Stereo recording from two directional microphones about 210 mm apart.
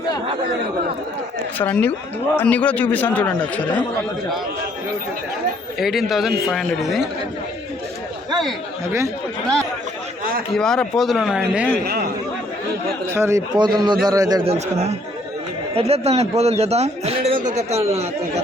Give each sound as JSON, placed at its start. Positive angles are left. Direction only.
{"t": 1.5, "sound": "a man's voice", "side_deg": 10}
{"t": 5.8, "sound": "a man's voice", "side_deg": 0}
{"t": 10.5, "sound": "a man's voice", "side_deg": 5}
{"t": 13.1, "sound": "a man's voice", "side_deg": -15}
{"t": 14.5, "sound": "a man's voice", "side_deg": -30}